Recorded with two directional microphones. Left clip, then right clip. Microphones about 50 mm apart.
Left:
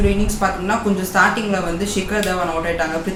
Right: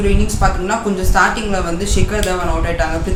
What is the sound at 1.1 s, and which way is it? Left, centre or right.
A woman's voice, centre.